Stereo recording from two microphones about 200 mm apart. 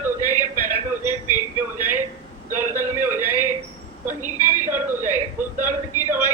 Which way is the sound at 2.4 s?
40° right (ahead or behind).